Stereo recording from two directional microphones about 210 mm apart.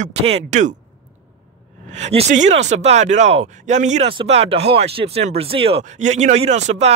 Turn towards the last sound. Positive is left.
turn(degrees=-30)  # may be behind; listen again after turning